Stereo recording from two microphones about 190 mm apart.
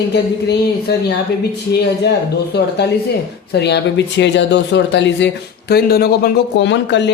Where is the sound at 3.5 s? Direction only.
60° left (ahead or behind).